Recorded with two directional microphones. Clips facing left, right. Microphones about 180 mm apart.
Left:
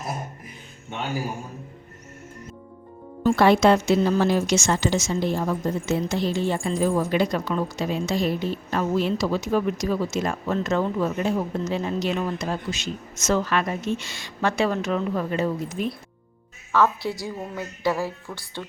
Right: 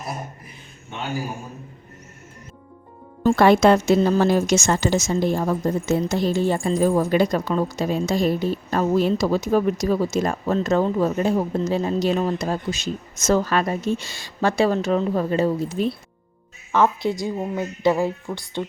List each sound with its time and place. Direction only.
3.2 s a woman's voice: 50° right (ahead or behind); by 16.0 s 30° right (ahead or behind)
16.7 s a woman's voice: 20° right (ahead or behind)